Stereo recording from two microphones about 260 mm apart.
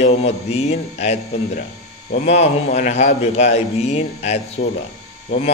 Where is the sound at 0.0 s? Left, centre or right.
Left.